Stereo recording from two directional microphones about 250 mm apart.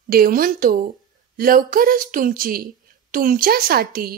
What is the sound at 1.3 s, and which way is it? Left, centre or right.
Speech, right.